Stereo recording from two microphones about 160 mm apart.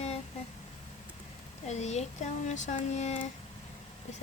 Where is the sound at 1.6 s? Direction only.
45° left (ahead or behind).